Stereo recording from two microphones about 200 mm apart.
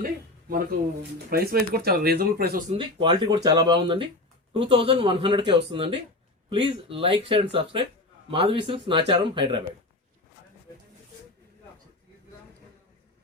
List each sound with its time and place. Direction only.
0.0 s speech: 45° right (ahead or behind)
2.6 s speech: 25° right (ahead or behind)